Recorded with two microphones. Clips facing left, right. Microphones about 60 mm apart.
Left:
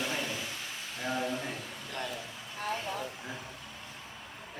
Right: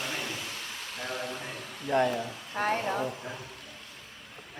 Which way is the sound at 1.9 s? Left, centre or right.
Right.